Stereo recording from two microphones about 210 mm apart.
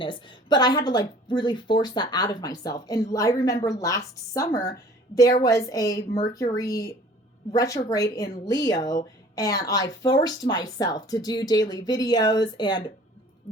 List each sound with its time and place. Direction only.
0.0 s speech: 25° left (ahead or behind)